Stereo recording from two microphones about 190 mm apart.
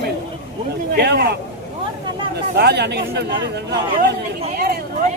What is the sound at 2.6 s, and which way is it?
Speech, 60° right (ahead or behind).